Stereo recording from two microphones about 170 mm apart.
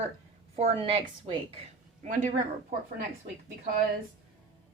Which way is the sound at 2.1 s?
50° right (ahead or behind).